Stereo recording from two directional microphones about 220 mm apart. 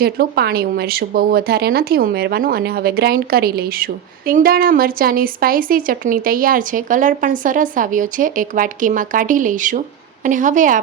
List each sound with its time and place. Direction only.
0.0 s speech: 45° right (ahead or behind)